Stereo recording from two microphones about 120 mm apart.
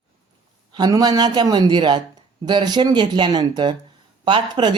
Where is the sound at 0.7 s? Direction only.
35° right (ahead or behind).